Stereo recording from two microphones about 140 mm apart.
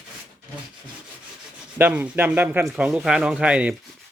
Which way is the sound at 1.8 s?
10° right (ahead or behind).